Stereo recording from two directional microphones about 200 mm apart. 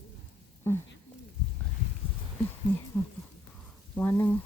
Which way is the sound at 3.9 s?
10° left (ahead or behind).